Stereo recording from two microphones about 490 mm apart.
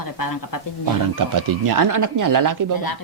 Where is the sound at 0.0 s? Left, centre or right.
Left.